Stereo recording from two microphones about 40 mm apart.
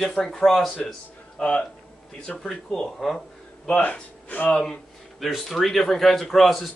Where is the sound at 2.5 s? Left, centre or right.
Centre.